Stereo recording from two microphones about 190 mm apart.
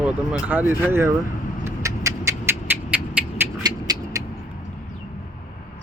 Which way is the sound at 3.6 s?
20° right (ahead or behind).